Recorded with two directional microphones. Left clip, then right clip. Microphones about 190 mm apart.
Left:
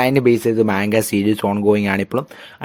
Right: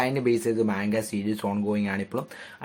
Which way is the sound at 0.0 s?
55° left (ahead or behind).